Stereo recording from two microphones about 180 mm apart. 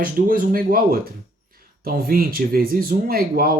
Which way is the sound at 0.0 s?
50° right (ahead or behind).